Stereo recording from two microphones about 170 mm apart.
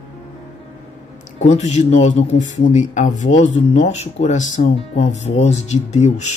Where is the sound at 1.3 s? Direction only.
45° left (ahead or behind).